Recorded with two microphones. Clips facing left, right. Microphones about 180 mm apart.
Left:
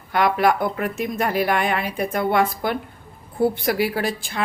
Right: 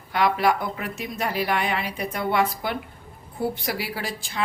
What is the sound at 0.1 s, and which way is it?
A woman's voice, 50° left (ahead or behind).